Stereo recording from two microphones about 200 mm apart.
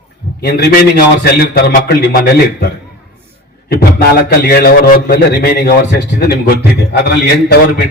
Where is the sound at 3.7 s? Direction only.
50° left (ahead or behind).